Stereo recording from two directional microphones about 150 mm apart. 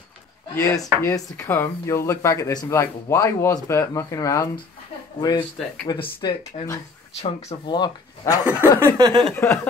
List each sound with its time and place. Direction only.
0.6 s speech: 20° left (ahead or behind)
5.4 s speech: 5° left (ahead or behind)
5.9 s speech: 30° left (ahead or behind)
6.5 s speech: 45° left (ahead or behind)
7.6 s speech: 30° left (ahead or behind)
8.5 s speech: 15° right (ahead or behind)
8.9 s a sound: 30° right (ahead or behind)
9.3 s speech: 15° left (ahead or behind)